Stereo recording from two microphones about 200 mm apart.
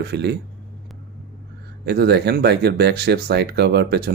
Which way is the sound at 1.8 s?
55° right (ahead or behind).